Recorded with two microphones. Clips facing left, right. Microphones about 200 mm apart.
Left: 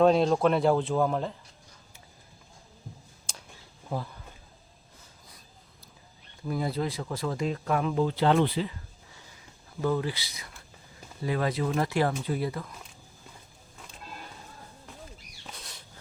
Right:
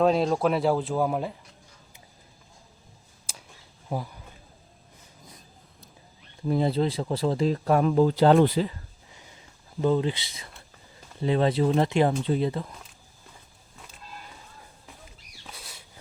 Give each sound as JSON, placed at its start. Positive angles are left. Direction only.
{"t": 0.0, "sound": "speech", "side_deg": 0}
{"t": 3.3, "sound": "a sound", "side_deg": -5}
{"t": 3.9, "sound": "speech", "side_deg": -15}
{"t": 6.5, "sound": "speech", "side_deg": -25}
{"t": 9.8, "sound": "speech", "side_deg": -20}
{"t": 15.4, "sound": "a sound", "side_deg": -5}